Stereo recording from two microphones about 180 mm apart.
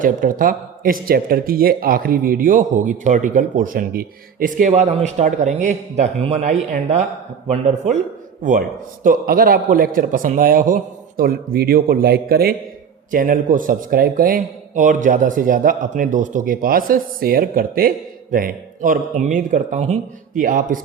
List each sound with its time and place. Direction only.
0.0 s speech: 50° right (ahead or behind)
4.7 s a man's voice: 35° right (ahead or behind)
9.0 s speech: 50° right (ahead or behind)